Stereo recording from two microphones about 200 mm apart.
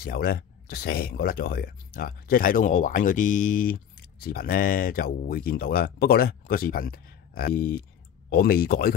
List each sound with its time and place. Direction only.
0.0 s speech: 50° left (ahead or behind)